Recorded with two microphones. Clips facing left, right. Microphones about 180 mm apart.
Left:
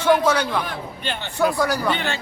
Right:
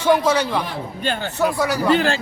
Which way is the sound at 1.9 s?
90° right.